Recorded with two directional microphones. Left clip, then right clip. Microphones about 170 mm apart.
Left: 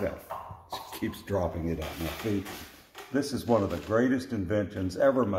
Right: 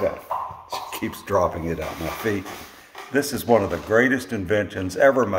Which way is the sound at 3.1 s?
40° right (ahead or behind).